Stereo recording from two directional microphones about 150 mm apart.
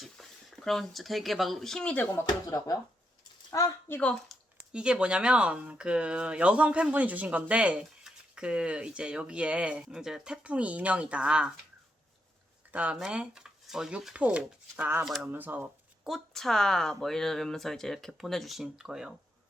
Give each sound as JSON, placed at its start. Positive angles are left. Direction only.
{"t": 0.0, "sound": "speech", "side_deg": 0}
{"t": 2.2, "sound": "a woman's voice", "side_deg": 25}
{"t": 4.1, "sound": "speech", "side_deg": 0}
{"t": 12.7, "sound": "speech", "side_deg": -10}
{"t": 15.0, "sound": "speech", "side_deg": 0}
{"t": 15.3, "sound": "speech", "side_deg": -10}